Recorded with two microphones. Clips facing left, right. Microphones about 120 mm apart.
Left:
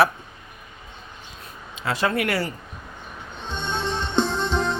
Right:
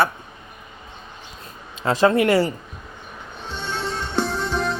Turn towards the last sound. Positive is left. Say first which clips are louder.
# even
turn(degrees=20)  # may be behind; listen again after turning